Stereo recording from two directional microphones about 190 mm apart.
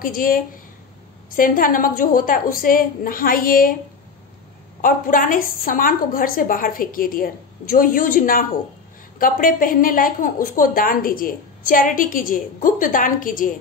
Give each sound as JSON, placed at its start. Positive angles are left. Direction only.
{"t": 0.0, "sound": "a woman's voice", "side_deg": 50}
{"t": 4.8, "sound": "a woman's voice", "side_deg": 45}